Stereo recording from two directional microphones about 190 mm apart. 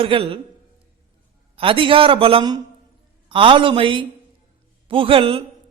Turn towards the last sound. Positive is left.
turn(degrees=-30)  # may be behind; listen again after turning